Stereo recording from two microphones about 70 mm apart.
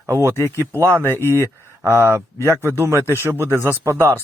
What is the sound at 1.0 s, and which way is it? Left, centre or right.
Speech, left.